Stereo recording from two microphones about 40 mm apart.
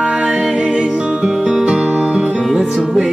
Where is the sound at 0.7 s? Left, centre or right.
Right.